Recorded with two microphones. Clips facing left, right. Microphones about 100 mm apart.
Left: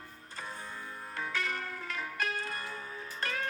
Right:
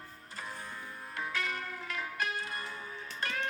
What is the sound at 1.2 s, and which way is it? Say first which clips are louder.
Music: left 1 dB; 5° right (ahead or behind).